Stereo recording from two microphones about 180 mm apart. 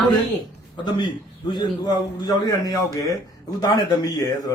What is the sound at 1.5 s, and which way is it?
A man's voice, 25° left (ahead or behind).